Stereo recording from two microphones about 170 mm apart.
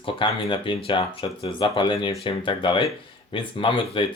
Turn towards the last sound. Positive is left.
turn(degrees=30)  # may be behind; listen again after turning